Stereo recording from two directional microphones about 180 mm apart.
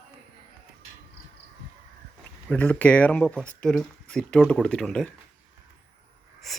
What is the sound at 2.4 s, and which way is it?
Speech, 10° left (ahead or behind).